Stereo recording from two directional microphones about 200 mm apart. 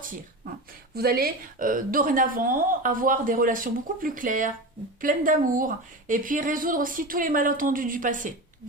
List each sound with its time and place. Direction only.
0.9 s a woman's voice: 50° right (ahead or behind)